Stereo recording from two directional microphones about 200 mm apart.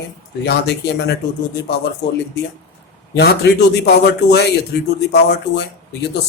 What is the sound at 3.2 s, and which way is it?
A man's voice, 55° left (ahead or behind).